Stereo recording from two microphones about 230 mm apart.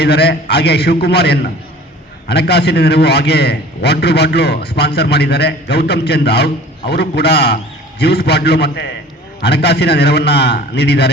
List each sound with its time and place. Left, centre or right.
0.0 s a man's voice: left